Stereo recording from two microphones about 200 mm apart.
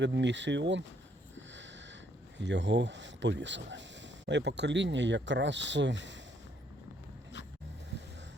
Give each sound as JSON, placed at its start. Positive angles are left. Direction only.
{"t": 0.0, "sound": "speech", "side_deg": -60}
{"t": 1.4, "sound": "sniff", "side_deg": -65}
{"t": 2.4, "sound": "speech", "side_deg": -65}